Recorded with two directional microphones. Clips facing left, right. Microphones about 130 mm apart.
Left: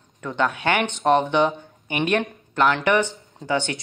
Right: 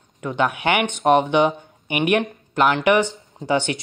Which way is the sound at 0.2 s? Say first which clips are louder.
Right 2 dB; 15° right (ahead or behind).